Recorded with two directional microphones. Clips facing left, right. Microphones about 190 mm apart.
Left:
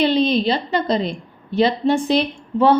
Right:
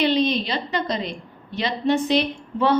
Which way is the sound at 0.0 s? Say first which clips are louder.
Left 4 dB; 30° left (ahead or behind).